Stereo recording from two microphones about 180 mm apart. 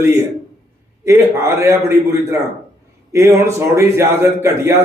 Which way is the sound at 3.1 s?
15° right (ahead or behind).